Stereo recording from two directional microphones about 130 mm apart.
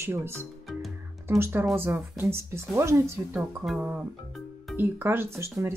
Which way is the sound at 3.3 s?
5° right (ahead or behind).